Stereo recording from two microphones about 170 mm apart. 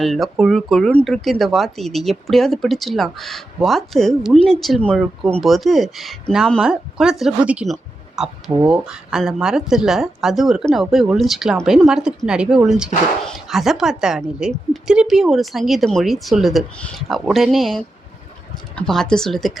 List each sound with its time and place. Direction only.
0.0 s a woman's voice: centre (ahead or behind)
7.7 s a sound: 5° right (ahead or behind)
8.7 s a woman's voice: 5° right (ahead or behind)